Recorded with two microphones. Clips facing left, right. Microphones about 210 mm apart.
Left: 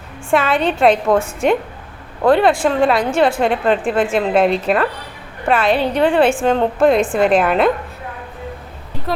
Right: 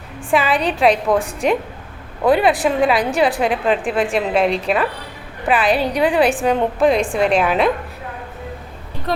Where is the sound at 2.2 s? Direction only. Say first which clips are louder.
Left 2 dB; 5° right (ahead or behind).